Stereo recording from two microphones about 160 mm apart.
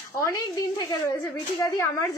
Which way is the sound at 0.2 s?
20° left (ahead or behind).